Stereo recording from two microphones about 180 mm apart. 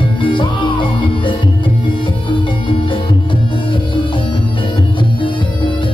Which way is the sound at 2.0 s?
25° left (ahead or behind).